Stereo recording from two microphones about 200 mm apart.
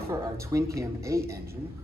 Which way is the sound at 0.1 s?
15° right (ahead or behind).